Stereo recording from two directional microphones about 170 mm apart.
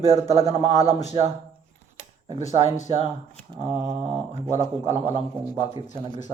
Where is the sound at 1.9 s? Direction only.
40° right (ahead or behind).